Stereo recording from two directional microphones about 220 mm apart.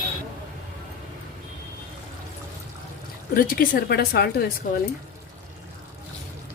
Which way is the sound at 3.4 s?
40° left (ahead or behind).